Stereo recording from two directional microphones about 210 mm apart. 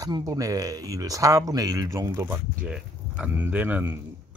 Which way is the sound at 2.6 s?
5° right (ahead or behind).